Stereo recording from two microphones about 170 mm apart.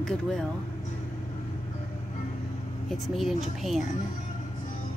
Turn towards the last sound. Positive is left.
turn(degrees=0)  # may be behind; listen again after turning